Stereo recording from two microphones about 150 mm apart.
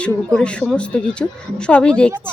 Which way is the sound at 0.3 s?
5° left (ahead or behind).